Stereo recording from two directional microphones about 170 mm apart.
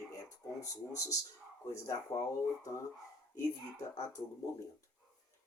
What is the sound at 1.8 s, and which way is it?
Speech, 20° left (ahead or behind).